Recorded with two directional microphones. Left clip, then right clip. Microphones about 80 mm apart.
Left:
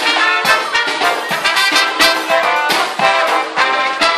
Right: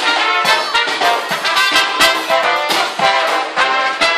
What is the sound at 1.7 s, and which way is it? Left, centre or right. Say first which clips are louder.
Music: even; centre.